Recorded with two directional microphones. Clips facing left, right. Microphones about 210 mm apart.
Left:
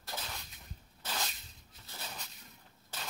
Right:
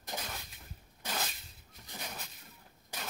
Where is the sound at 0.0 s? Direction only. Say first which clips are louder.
Right 2 dB; 15° right (ahead or behind).